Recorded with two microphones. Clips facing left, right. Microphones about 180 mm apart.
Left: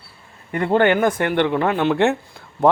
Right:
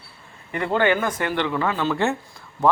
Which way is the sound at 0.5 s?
45° left (ahead or behind).